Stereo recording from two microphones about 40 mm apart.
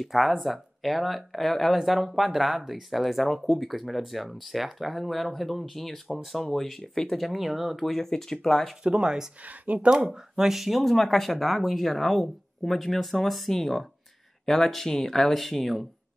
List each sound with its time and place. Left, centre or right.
0.0 s speech: centre
7.2 s speech: centre
8.8 s speech: right
9.4 s speech: right
10.1 s speech: centre